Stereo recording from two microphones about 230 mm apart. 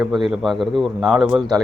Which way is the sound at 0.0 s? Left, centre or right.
Centre.